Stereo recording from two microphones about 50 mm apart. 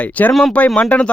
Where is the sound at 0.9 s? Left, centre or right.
Left.